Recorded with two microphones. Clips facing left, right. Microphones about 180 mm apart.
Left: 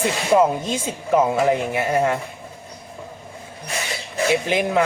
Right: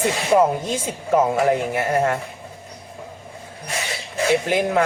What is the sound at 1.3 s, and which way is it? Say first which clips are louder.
Speech: even; 20° left (ahead or behind).